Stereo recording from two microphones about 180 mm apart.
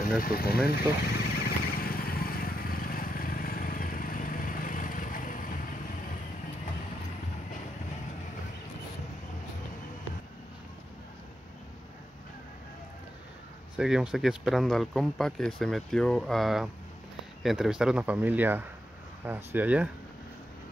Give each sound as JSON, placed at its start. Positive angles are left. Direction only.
{"t": 0.2, "sound": "vehicle", "side_deg": 55}
{"t": 13.7, "sound": "speech", "side_deg": -5}